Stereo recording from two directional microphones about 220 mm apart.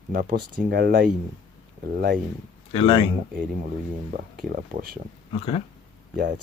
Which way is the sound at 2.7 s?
25° left (ahead or behind).